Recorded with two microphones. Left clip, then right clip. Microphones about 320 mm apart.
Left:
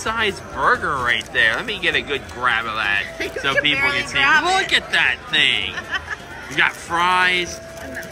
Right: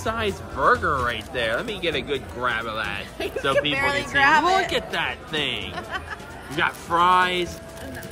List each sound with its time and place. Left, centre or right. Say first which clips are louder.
0.0 s speech: left 5 dB; centre
3.7 s speech: left 3 dB; right
4.6 s speech: left 8 dB; centre
5.8 s speech: left 5 dB; right
6.5 s speech: left 4 dB; centre